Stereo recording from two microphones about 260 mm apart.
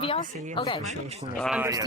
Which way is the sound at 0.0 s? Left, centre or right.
Centre.